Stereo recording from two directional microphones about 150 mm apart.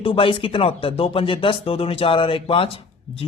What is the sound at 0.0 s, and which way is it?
Speech, 35° left (ahead or behind).